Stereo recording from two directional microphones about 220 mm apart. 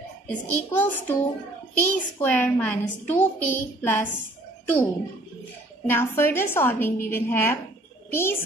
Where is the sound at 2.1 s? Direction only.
10° left (ahead or behind).